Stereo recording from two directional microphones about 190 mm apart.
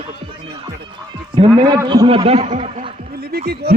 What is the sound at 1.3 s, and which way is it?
A man's voice, 20° right (ahead or behind).